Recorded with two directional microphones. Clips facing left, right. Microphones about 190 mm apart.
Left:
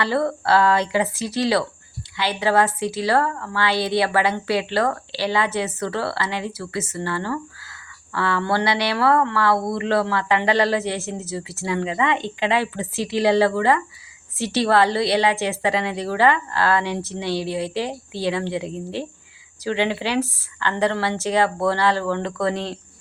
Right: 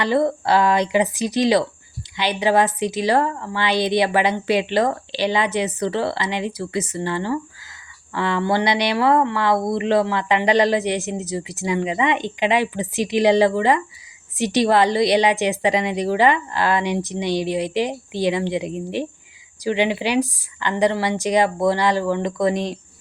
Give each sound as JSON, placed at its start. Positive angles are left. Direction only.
{"t": 0.0, "sound": "speech", "side_deg": -15}